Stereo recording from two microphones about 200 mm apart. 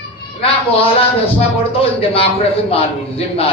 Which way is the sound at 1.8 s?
30° left (ahead or behind).